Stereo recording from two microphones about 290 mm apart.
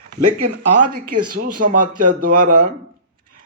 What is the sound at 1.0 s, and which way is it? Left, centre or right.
Speech, right.